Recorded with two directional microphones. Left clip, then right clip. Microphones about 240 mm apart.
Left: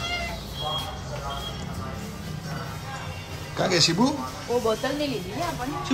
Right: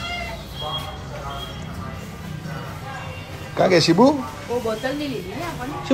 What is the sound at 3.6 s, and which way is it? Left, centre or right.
Speech, centre.